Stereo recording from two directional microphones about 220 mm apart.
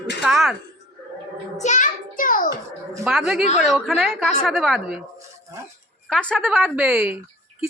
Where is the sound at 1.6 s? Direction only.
35° left (ahead or behind).